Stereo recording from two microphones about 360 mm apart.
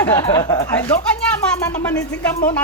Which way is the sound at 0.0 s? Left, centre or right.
Centre.